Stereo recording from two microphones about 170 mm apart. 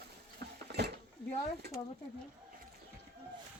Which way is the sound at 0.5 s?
75° right (ahead or behind).